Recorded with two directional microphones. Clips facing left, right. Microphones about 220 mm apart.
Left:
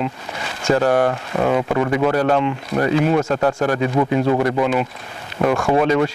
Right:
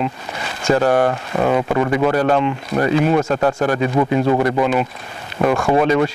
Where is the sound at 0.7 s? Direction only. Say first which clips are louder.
Right 1 dB; 25° right (ahead or behind).